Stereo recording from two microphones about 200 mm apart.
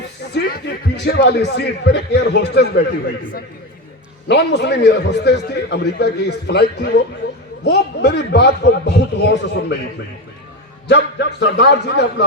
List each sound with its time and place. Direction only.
0.3 s a man's voice: 55° left (ahead or behind)
4.3 s a man's voice: 60° left (ahead or behind)
10.8 s a man's voice: 60° left (ahead or behind)